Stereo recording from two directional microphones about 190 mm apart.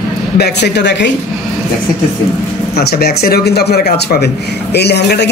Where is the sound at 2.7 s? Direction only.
55° left (ahead or behind).